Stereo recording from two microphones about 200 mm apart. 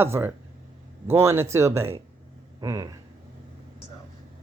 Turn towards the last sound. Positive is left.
turn(degrees=-15)  # may be behind; listen again after turning